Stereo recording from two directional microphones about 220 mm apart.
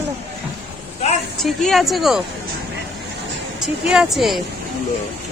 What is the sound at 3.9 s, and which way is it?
Speech, centre (ahead or behind).